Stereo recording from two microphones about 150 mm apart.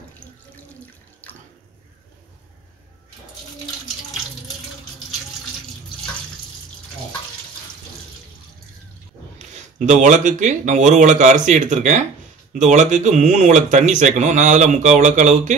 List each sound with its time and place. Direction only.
9.8 s speech: 55° right (ahead or behind)